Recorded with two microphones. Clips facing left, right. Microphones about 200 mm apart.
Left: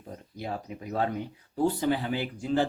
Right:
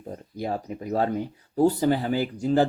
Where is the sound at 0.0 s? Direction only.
40° right (ahead or behind).